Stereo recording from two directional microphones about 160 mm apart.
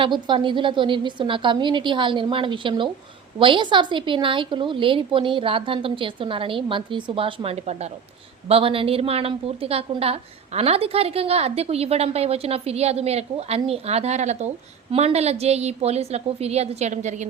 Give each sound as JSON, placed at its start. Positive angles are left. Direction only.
{"t": 0.0, "sound": "a woman's voice", "side_deg": -30}